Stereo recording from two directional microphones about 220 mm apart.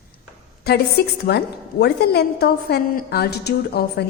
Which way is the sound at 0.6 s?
45° left (ahead or behind).